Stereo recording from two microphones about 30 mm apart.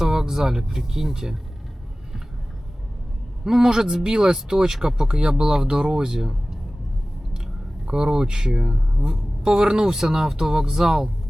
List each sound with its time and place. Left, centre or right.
0.0 s speech: centre
3.4 s speech: centre
7.9 s speech: right